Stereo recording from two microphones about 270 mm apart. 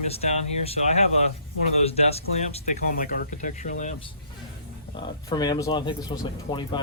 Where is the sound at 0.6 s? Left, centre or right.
Left.